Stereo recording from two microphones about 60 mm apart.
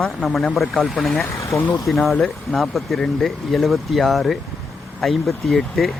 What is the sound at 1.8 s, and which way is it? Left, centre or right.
Speech, centre.